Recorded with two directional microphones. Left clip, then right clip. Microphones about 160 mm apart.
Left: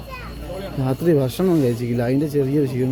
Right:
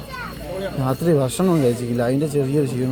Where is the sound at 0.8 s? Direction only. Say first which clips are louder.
Left 1 dB; 25° left (ahead or behind).